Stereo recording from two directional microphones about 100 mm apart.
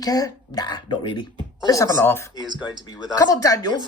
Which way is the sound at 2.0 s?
20° left (ahead or behind).